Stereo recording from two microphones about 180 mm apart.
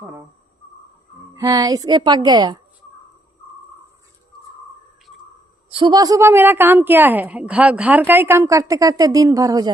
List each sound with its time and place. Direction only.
0.0 s speech: 15° right (ahead or behind)
1.4 s a woman's voice: 20° right (ahead or behind)
5.7 s a woman's voice: 25° right (ahead or behind)